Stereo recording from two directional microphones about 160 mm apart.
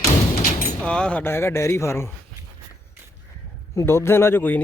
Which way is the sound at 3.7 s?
15° left (ahead or behind).